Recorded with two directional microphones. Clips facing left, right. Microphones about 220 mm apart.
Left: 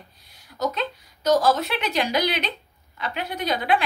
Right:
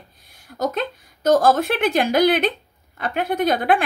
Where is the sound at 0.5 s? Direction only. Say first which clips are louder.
Right 3 dB; 50° right (ahead or behind).